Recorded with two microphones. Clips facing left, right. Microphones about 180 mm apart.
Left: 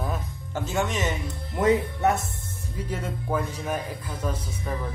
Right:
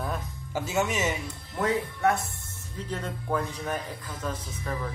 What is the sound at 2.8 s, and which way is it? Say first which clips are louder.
Speech: left 2 dB; 10° left (ahead or behind).